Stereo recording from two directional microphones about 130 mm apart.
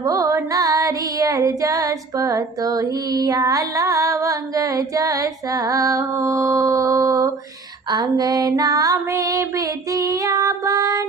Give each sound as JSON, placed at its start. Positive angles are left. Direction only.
{"t": 0.0, "sound": "music", "side_deg": -25}